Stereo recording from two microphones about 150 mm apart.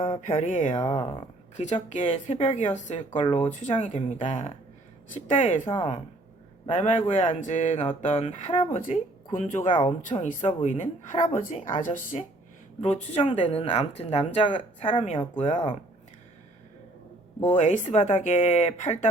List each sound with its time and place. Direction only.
0.0 s speech: 45° left (ahead or behind)
0.9 s speech: 40° left (ahead or behind); by 5.5 s 55° left (ahead or behind)
6.7 s speech: 50° left (ahead or behind)
12.8 s speech: 45° left (ahead or behind)
17.4 s speech: 50° left (ahead or behind)